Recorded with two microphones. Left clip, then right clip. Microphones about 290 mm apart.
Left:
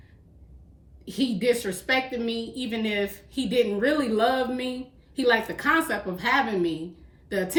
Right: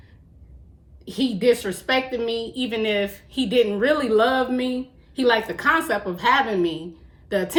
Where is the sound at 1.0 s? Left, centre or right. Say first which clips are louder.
Right 5 dB; centre.